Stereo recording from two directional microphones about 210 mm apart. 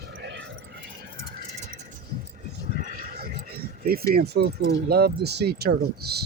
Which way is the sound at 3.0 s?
45° right (ahead or behind).